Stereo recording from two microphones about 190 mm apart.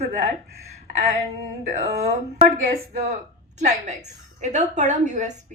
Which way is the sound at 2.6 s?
40° right (ahead or behind).